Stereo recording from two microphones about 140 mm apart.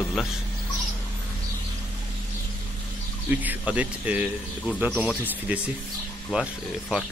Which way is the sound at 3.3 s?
10° right (ahead or behind).